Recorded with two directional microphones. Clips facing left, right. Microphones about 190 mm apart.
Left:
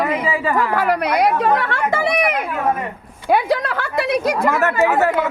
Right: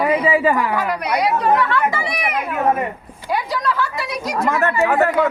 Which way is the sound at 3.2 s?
60° left (ahead or behind).